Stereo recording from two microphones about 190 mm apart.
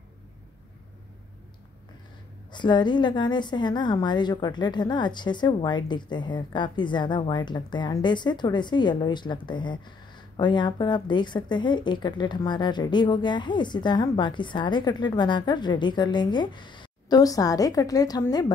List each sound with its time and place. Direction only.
2.5 s a woman's voice: 25° left (ahead or behind)